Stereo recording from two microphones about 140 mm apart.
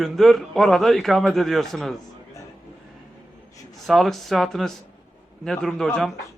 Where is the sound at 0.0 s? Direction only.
Centre (ahead or behind).